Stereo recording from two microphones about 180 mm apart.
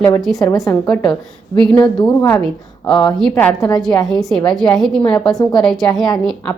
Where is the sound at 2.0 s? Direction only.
25° left (ahead or behind).